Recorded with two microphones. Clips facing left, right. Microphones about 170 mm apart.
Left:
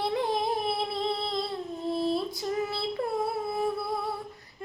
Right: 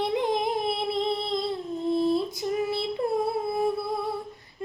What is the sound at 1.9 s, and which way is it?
Female singing, 20° right (ahead or behind).